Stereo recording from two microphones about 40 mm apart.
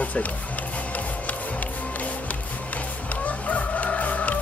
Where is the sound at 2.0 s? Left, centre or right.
Left.